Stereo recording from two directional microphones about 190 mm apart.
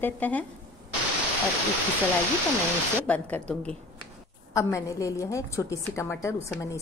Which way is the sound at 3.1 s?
5° left (ahead or behind).